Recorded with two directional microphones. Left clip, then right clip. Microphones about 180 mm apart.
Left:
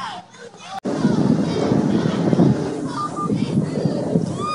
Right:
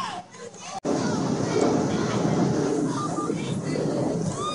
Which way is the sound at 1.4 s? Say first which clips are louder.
Left 2 dB; centre (ahead or behind).